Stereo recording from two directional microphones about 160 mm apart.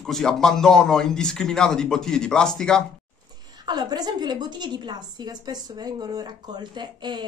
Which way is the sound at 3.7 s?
25° right (ahead or behind).